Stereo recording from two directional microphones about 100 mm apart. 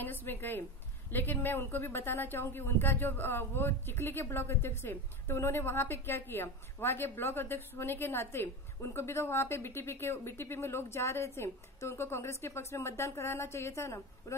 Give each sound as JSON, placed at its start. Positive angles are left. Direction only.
{"t": 0.0, "sound": "a woman's voice", "side_deg": 20}